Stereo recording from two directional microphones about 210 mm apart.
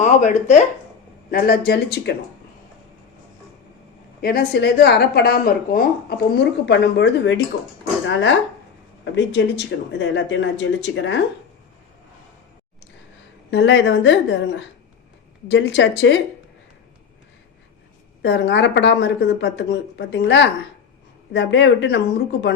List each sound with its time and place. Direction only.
0.0 s speech: 35° left (ahead or behind)
1.3 s speech: 45° left (ahead or behind)
4.2 s speech: 45° left (ahead or behind); by 11.2 s 60° left (ahead or behind)
13.5 s speech: 60° left (ahead or behind)
18.2 s speech: 55° left (ahead or behind)